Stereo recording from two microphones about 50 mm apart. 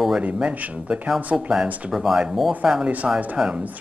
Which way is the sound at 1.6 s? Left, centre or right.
Right.